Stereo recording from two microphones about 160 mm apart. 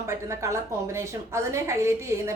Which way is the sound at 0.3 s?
15° right (ahead or behind).